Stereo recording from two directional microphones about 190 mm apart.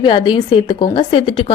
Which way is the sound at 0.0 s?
25° left (ahead or behind).